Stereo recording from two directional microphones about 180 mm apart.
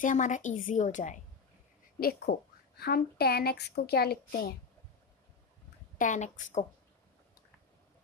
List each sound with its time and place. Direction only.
0.0 s a woman's voice: 45° left (ahead or behind)
2.0 s a woman's voice: 55° left (ahead or behind)
5.9 s a woman's voice: 45° left (ahead or behind)